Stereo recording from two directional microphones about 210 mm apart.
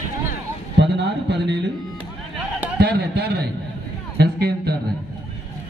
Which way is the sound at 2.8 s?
55° right (ahead or behind).